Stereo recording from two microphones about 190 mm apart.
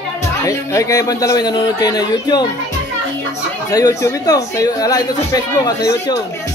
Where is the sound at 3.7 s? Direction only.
20° left (ahead or behind).